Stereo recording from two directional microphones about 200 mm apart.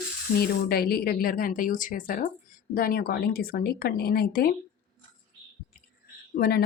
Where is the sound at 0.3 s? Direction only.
50° left (ahead or behind).